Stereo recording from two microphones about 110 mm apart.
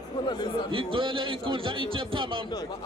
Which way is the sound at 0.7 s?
55° right (ahead or behind).